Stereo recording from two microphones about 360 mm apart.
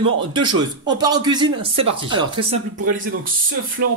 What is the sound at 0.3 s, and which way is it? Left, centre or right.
Speech, centre.